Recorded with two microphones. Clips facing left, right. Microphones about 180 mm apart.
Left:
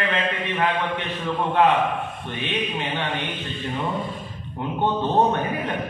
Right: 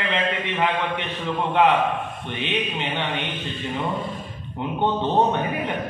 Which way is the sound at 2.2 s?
20° right (ahead or behind).